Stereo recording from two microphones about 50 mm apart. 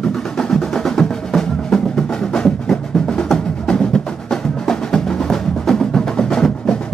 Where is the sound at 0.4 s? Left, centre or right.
Centre.